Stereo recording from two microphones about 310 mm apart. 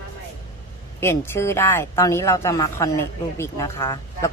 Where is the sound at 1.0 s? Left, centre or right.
Centre.